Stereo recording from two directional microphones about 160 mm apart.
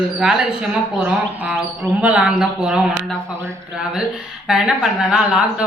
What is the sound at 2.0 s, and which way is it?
Speech, 5° right (ahead or behind).